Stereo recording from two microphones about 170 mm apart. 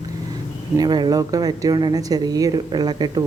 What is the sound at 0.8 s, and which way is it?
Speech, 25° right (ahead or behind).